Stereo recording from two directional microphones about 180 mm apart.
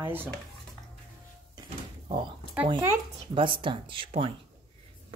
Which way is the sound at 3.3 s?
30° right (ahead or behind).